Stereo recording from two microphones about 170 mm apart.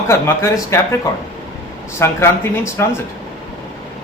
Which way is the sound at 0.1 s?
15° left (ahead or behind).